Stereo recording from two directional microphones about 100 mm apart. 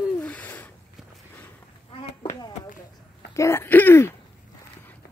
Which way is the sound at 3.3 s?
30° left (ahead or behind).